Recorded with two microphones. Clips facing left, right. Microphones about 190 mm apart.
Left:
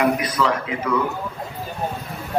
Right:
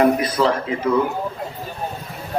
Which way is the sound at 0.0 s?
35° right (ahead or behind).